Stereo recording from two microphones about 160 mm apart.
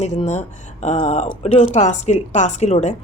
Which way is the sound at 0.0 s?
45° left (ahead or behind).